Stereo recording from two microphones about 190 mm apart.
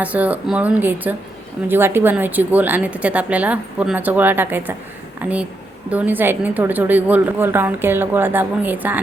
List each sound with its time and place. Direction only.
0.0 s a woman's voice: 10° right (ahead or behind)